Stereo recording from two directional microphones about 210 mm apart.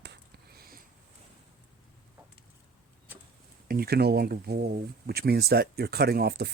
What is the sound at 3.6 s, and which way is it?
Speech, 45° right (ahead or behind).